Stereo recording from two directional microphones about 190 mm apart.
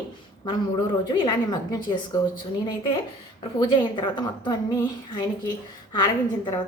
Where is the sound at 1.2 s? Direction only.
20° left (ahead or behind).